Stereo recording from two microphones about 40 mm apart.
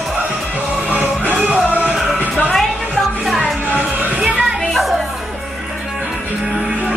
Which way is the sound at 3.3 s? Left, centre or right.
Centre.